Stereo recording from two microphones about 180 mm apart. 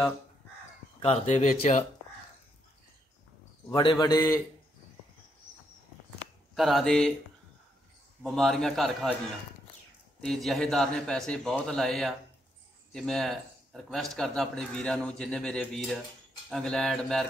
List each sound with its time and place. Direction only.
1.0 s speech: 35° left (ahead or behind)
3.9 s a man's voice: 20° left (ahead or behind)
6.5 s a man's voice: centre (ahead or behind)
8.2 s a man's voice: centre (ahead or behind)
10.2 s a man's voice: centre (ahead or behind)